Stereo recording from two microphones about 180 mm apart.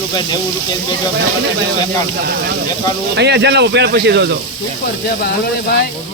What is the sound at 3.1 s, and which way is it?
Speech, 70° right (ahead or behind).